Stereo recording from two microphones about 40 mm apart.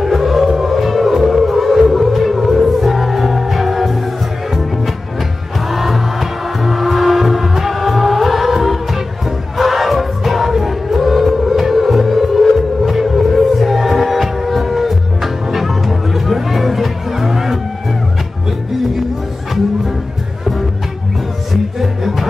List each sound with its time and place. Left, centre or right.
0.0 s music: centre
21.7 s music: centre